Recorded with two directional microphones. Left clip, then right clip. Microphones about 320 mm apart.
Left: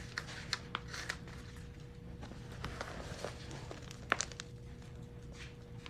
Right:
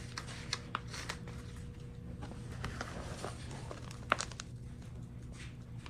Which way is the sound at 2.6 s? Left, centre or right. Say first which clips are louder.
Right 1 dB; centre.